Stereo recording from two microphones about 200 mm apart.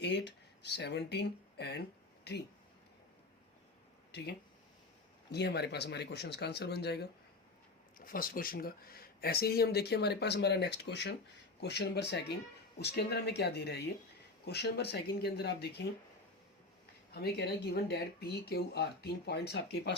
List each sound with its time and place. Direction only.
0.0 s speech: 60° left (ahead or behind)
4.1 s speech: 55° left (ahead or behind)
17.2 s speech: 55° left (ahead or behind)